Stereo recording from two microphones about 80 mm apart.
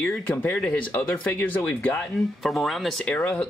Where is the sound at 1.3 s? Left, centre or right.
Left.